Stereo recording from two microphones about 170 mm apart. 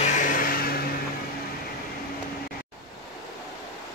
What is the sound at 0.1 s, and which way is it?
Music, 50° left (ahead or behind).